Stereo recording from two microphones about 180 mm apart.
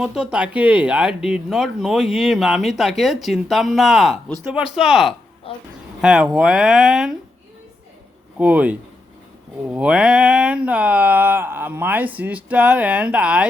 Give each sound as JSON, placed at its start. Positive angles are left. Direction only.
{"t": 0.0, "sound": "speech", "side_deg": -5}
{"t": 5.5, "sound": "a woman's voice", "side_deg": 30}
{"t": 6.0, "sound": "speech", "side_deg": -5}
{"t": 8.4, "sound": "speech", "side_deg": -10}